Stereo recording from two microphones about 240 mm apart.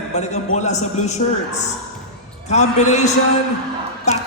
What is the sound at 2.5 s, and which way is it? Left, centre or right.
Speech, left.